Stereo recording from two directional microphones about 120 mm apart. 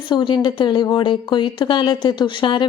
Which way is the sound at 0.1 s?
40° left (ahead or behind).